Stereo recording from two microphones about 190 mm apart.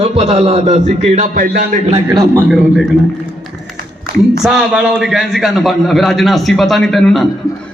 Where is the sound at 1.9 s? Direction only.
20° right (ahead or behind).